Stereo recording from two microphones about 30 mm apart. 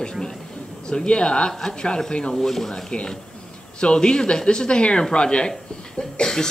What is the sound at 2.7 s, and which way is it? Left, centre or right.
Speech, left.